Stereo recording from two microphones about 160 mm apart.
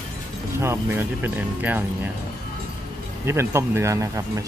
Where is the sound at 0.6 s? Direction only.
15° right (ahead or behind).